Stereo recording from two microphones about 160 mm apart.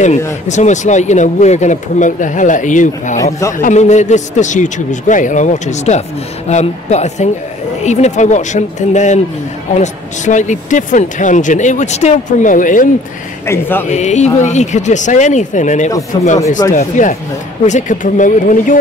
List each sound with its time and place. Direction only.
0.5 s speech: 50° left (ahead or behind)
13.5 s speech: 15° left (ahead or behind)
13.8 s speech: 45° left (ahead or behind)
16.1 s speech: 25° left (ahead or behind)
16.7 s speech: 55° left (ahead or behind)